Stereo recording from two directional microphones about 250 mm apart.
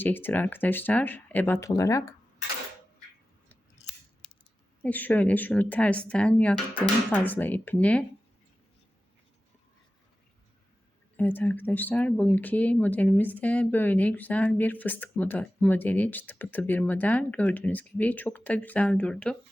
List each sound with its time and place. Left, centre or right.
0.0 s speech: centre
4.2 s a sound: centre
4.8 s a woman's voice: centre
11.2 s speech: centre